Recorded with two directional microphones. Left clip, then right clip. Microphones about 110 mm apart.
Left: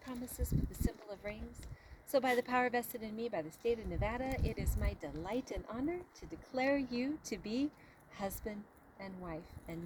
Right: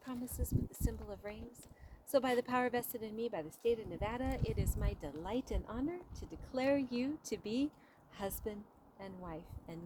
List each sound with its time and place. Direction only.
0.1 s a sound: 45° right (ahead or behind)
0.8 s a woman's voice: 45° right (ahead or behind)
6.1 s a woman's voice: 50° right (ahead or behind)